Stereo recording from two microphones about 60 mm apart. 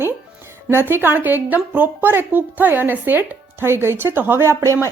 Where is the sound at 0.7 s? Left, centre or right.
Right.